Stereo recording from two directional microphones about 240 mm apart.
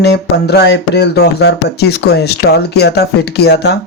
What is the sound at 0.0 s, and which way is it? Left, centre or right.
A woman's voice, left.